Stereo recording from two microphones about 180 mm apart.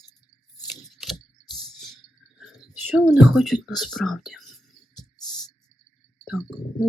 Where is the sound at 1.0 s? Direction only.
Centre (ahead or behind).